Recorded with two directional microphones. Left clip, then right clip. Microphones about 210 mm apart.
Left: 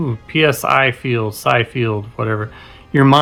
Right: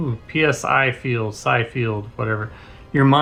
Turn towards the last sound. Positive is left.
turn(degrees=35)  # may be behind; listen again after turning